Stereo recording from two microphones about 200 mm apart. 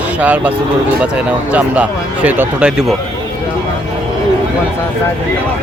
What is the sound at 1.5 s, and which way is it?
Speech, 5° right (ahead or behind).